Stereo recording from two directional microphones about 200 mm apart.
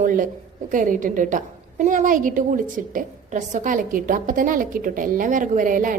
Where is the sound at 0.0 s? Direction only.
40° right (ahead or behind).